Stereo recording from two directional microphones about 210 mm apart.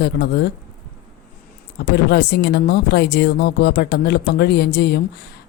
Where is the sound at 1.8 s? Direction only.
50° left (ahead or behind).